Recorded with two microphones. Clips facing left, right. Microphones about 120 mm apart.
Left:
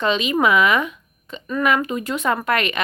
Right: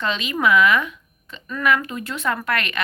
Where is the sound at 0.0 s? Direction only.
20° left (ahead or behind).